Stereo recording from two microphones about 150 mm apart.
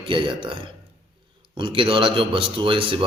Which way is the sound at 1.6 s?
35° right (ahead or behind).